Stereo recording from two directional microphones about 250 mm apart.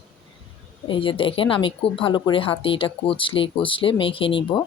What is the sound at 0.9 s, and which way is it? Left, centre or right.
Speech, left.